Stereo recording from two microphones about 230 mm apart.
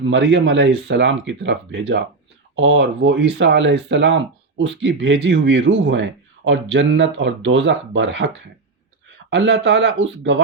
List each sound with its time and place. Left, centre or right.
0.0 s speech: right
9.3 s speech: right